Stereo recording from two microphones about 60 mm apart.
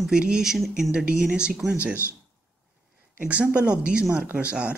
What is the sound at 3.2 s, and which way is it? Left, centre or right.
Speech, right.